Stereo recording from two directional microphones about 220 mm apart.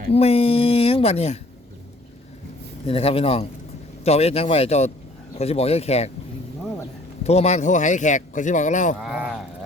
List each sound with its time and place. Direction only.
0.1 s a woman's voice: 25° left (ahead or behind)
2.8 s a woman's voice: 25° left (ahead or behind)
7.3 s speech: 30° left (ahead or behind)
9.0 s a sound: 5° right (ahead or behind)